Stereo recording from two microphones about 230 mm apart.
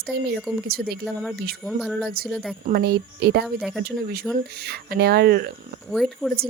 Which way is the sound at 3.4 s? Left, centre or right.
Centre.